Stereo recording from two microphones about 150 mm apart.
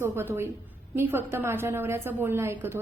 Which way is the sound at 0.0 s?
15° right (ahead or behind).